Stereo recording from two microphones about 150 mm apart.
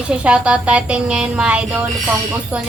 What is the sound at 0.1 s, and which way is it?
Speech, 5° right (ahead or behind).